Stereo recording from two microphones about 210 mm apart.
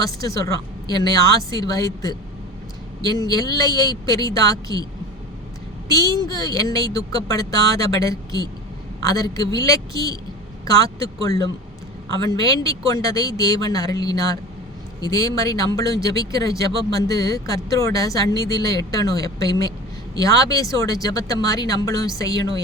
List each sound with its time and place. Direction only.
0.0 s a man's voice: 15° left (ahead or behind)
5.9 s a man's voice: 15° left (ahead or behind)